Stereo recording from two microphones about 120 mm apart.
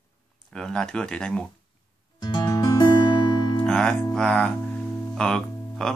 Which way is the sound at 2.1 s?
35° left (ahead or behind).